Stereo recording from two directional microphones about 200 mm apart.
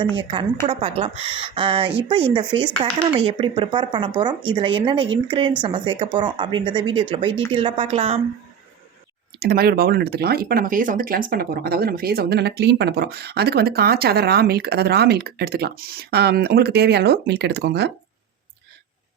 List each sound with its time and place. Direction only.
0.2 s speech: 25° right (ahead or behind)
9.4 s speech: 50° right (ahead or behind)